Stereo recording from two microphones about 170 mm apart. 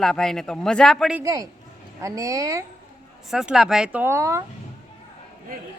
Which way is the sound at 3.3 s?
Centre (ahead or behind).